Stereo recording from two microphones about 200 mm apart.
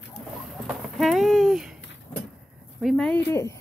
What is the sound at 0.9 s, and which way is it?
Speech, centre (ahead or behind).